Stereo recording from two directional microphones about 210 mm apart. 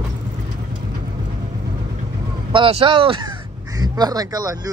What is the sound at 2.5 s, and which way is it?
Speech, 25° right (ahead or behind).